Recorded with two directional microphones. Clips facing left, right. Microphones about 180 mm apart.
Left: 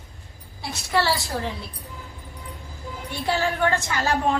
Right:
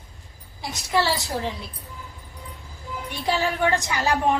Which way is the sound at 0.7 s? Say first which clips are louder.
Even; 15° right (ahead or behind).